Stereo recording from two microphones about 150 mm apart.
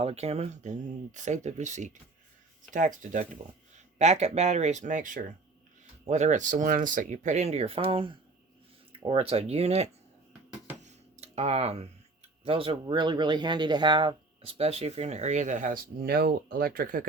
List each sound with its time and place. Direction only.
0.0 s speech: 45° right (ahead or behind); by 3.2 s 60° right (ahead or behind)
3.9 s speech: 50° right (ahead or behind)
10.8 s a sound: 50° right (ahead or behind)
12.5 s speech: 40° right (ahead or behind); by 17.0 s 70° right (ahead or behind)